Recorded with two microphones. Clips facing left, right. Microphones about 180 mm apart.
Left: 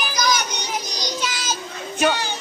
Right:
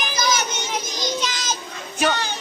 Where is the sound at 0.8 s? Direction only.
20° right (ahead or behind).